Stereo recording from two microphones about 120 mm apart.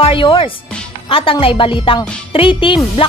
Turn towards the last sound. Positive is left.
turn(degrees=50)  # may be behind; listen again after turning